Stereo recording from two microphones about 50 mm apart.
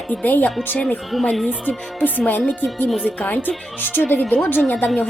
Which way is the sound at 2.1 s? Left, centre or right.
Left.